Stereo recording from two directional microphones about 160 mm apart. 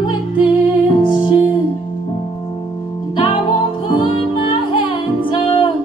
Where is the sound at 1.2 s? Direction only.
30° left (ahead or behind).